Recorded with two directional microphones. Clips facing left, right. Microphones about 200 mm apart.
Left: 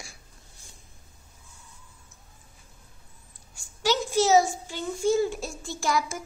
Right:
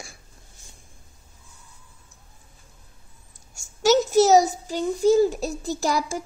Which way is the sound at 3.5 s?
45° right (ahead or behind).